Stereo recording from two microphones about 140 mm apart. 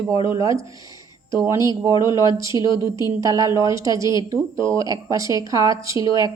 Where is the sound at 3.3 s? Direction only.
20° right (ahead or behind).